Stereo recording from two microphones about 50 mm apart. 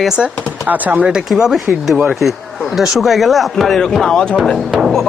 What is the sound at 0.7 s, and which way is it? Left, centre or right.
Speech, right.